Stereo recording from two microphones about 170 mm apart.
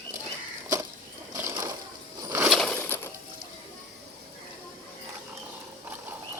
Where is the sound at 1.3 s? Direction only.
15° right (ahead or behind).